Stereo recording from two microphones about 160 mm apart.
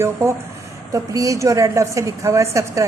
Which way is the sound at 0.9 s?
20° right (ahead or behind).